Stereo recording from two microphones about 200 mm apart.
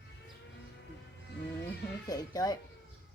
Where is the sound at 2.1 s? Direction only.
20° left (ahead or behind).